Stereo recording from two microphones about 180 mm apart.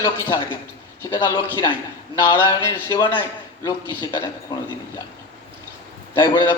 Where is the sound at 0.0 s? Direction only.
20° left (ahead or behind).